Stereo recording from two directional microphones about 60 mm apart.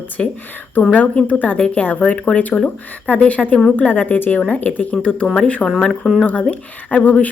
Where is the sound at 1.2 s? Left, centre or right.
Left.